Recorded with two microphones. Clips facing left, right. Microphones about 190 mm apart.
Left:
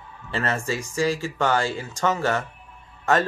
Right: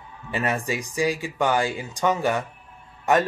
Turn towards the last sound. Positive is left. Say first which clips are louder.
# right 1 dB
turn(degrees=-15)  # may be behind; listen again after turning